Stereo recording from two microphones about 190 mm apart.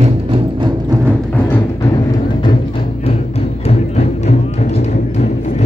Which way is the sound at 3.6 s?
35° left (ahead or behind).